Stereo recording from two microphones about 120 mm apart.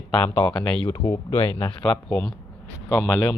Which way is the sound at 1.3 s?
50° left (ahead or behind).